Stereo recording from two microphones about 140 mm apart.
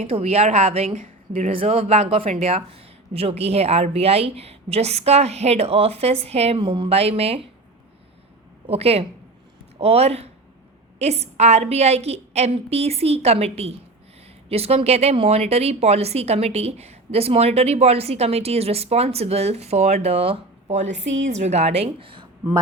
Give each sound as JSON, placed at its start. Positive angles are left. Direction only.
{"t": 0.0, "sound": "a woman's voice", "side_deg": -50}
{"t": 8.6, "sound": "a woman's voice", "side_deg": -45}